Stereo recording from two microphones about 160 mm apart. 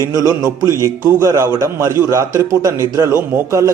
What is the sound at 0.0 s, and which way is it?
A man's voice, 20° right (ahead or behind).